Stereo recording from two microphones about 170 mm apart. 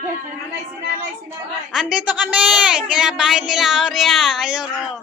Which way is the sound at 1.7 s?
5° right (ahead or behind).